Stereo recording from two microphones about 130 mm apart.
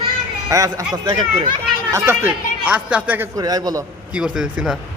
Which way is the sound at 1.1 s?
40° right (ahead or behind).